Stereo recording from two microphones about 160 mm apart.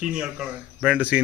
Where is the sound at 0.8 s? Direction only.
10° right (ahead or behind).